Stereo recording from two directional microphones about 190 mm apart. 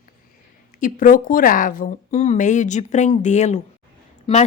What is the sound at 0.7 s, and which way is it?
A woman's voice, 45° left (ahead or behind).